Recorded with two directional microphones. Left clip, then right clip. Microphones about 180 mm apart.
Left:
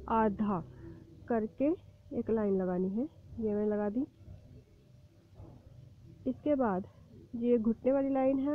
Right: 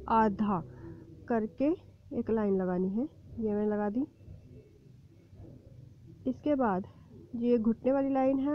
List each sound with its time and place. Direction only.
0.0 s a woman's voice: 20° right (ahead or behind)
6.2 s a woman's voice: 20° right (ahead or behind)